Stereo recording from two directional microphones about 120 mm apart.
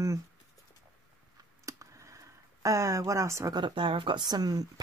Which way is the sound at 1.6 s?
25° right (ahead or behind).